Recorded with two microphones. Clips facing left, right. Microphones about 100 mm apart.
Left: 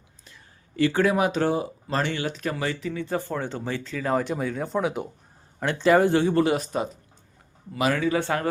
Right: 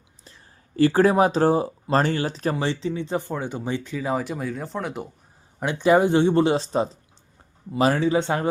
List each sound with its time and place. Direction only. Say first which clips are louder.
0.8 s speech: right 4 dB; 35° right (ahead or behind); by 4.1 s 15° right (ahead or behind)
4.1 s speech: left 2 dB; 5° right (ahead or behind)
5.5 s speech: right 1 dB; 15° right (ahead or behind)